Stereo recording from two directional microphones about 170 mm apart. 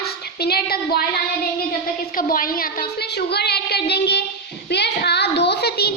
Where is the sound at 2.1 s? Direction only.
55° left (ahead or behind).